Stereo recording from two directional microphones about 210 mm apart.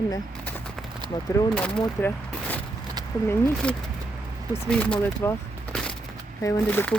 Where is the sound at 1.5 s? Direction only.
5° left (ahead or behind).